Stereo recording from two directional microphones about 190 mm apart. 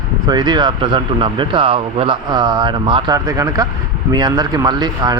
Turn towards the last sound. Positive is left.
turn(degrees=-20)  # may be behind; listen again after turning